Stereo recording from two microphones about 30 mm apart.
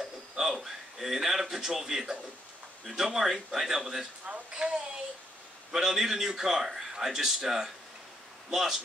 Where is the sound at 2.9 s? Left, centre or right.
Centre.